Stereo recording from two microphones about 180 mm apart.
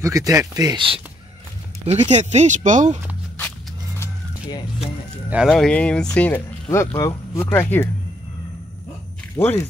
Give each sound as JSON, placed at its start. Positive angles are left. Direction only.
{"t": 0.0, "sound": "speech", "side_deg": -15}
{"t": 5.5, "sound": "speech", "side_deg": 5}
{"t": 9.4, "sound": "speech", "side_deg": 10}